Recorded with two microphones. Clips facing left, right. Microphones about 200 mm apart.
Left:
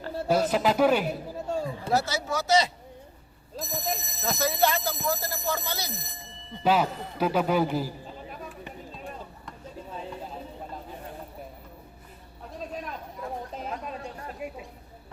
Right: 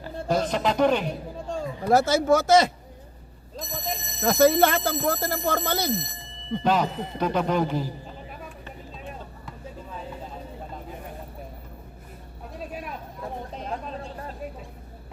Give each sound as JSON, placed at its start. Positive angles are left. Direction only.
{"t": 0.2, "sound": "speech", "side_deg": 5}
{"t": 1.9, "sound": "speech", "side_deg": -50}
{"t": 3.5, "sound": "speech", "side_deg": 5}
{"t": 4.2, "sound": "speech", "side_deg": -55}
{"t": 6.6, "sound": "speech", "side_deg": 5}
{"t": 12.5, "sound": "vehicle", "side_deg": -5}
{"t": 13.5, "sound": "a sound", "side_deg": 5}
{"t": 14.4, "sound": "speech", "side_deg": 10}